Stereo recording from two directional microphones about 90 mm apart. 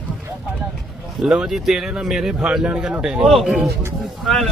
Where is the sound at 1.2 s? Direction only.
5° right (ahead or behind).